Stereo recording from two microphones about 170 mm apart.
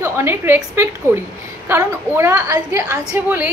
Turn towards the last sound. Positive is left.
turn(degrees=-10)  # may be behind; listen again after turning